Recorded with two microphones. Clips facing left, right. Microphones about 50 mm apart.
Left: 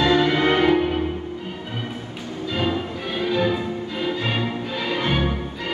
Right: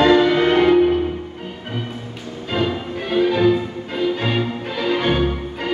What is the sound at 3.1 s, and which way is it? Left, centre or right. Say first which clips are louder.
Music: right 7 dB; right.